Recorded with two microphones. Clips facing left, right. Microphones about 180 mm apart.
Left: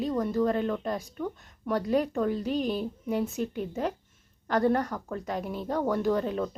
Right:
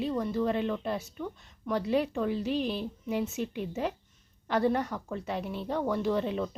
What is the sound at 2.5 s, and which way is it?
Speech, 40° left (ahead or behind).